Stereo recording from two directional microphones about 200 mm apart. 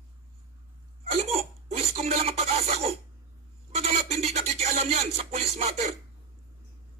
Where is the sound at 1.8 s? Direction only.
30° right (ahead or behind).